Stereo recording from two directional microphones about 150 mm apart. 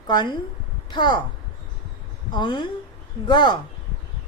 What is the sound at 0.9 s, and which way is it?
Speech, 30° left (ahead or behind).